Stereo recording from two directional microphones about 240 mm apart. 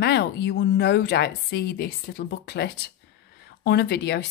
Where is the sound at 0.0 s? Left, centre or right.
Left.